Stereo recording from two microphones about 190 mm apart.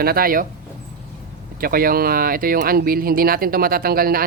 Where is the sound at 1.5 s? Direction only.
50° right (ahead or behind).